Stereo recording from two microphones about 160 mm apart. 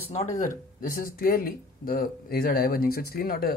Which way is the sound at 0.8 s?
65° left (ahead or behind).